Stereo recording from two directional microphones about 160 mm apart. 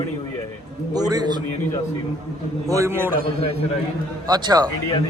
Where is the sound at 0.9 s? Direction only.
25° right (ahead or behind).